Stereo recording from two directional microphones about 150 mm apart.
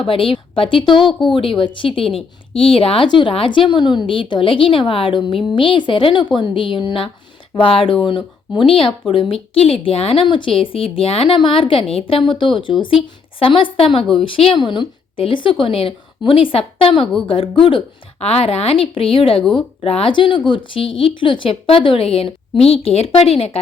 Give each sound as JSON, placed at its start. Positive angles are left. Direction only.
{"t": 0.1, "sound": "a woman's voice", "side_deg": 35}